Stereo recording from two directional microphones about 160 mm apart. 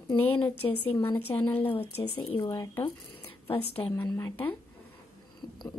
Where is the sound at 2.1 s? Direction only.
35° left (ahead or behind).